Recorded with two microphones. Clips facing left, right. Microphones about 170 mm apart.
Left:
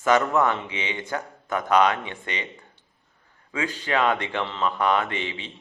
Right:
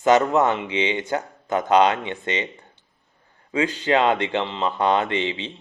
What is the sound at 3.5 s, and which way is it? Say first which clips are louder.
Speech: right 6 dB; 25° right (ahead or behind).